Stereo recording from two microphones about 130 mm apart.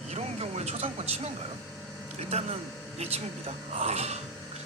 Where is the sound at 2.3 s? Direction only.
55° right (ahead or behind).